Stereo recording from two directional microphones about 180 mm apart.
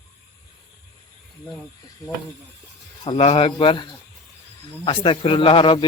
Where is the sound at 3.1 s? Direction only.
30° left (ahead or behind).